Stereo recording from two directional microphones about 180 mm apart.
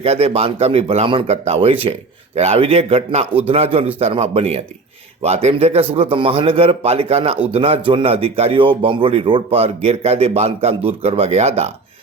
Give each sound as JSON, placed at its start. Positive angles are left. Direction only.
{"t": 0.0, "sound": "speech", "side_deg": -35}